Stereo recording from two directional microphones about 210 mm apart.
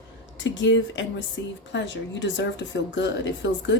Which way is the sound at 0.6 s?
60° left (ahead or behind).